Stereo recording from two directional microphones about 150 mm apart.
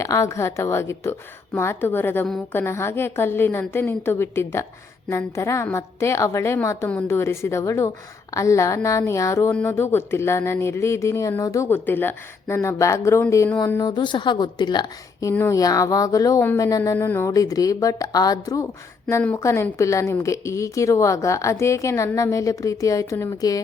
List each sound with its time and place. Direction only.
0.0 s a woman's voice: 20° left (ahead or behind)